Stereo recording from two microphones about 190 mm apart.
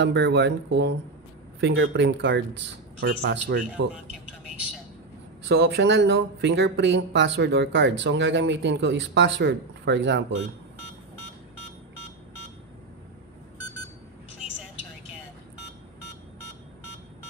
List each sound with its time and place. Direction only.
0.0 s speech: 65° right (ahead or behind)
1.6 s speech: 80° right
3.0 s speech: 60° right (ahead or behind)
5.5 s speech: 65° right (ahead or behind)